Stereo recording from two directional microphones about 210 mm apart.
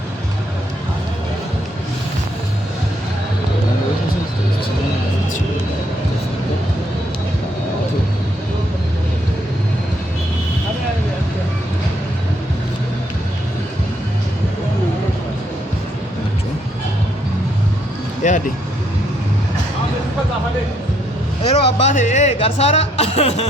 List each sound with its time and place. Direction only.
18.2 s vehicle: 35° left (ahead or behind)
21.5 s music: 30° left (ahead or behind)